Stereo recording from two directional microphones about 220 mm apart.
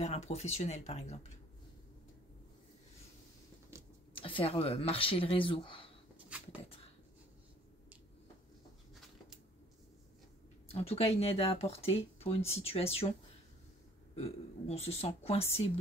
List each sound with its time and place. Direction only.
0.0 s speech: 30° left (ahead or behind)
3.7 s a sound: 10° right (ahead or behind)
4.1 s speech: 25° left (ahead or behind)
6.3 s speech: 5° right (ahead or behind)
10.7 s speech: 25° left (ahead or behind)
14.1 s speech: 30° left (ahead or behind)